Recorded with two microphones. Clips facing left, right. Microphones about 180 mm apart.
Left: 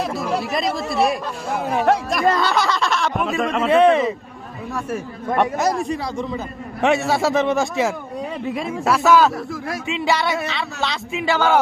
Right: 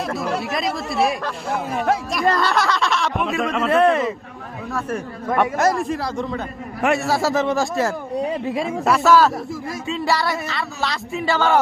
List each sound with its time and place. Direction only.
0.0 s speech: centre (ahead or behind)
5.5 s speech: centre (ahead or behind)
9.8 s music: 20° left (ahead or behind)
10.1 s speech: centre (ahead or behind)